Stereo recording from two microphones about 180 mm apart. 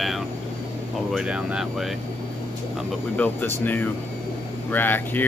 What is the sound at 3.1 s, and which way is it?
Speech, 10° left (ahead or behind).